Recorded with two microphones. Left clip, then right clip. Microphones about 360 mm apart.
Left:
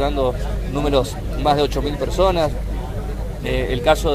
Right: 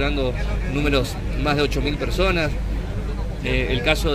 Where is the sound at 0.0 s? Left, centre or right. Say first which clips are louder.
Left 4 dB; left.